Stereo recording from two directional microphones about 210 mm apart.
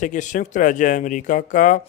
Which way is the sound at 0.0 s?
35° left (ahead or behind).